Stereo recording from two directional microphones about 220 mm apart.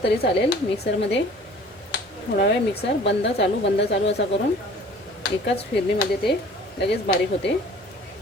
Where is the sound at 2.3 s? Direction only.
50° left (ahead or behind).